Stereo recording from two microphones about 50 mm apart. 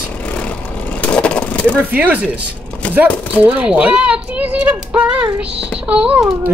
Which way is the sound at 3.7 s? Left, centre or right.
Right.